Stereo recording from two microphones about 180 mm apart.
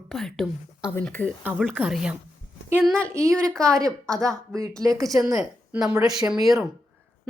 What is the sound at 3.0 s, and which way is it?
A woman's voice, 15° right (ahead or behind).